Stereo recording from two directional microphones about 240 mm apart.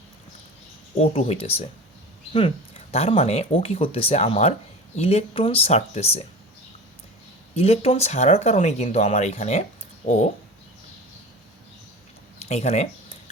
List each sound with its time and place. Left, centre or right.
0.9 s speech: left
7.5 s speech: left
12.4 s a sound: left